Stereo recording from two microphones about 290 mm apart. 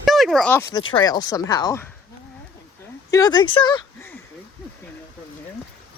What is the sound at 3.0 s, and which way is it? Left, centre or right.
Speech, centre.